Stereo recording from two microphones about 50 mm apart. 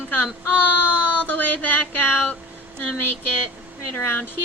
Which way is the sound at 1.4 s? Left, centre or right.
Left.